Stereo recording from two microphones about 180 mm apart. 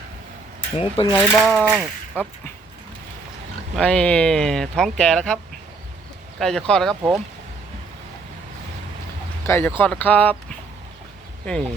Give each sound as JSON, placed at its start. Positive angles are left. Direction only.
{"t": 0.8, "sound": "speech", "side_deg": 30}
{"t": 1.1, "sound": "speech", "side_deg": 0}
{"t": 3.8, "sound": "speech", "side_deg": 5}
{"t": 6.4, "sound": "speech", "side_deg": 5}
{"t": 9.5, "sound": "speech", "side_deg": 10}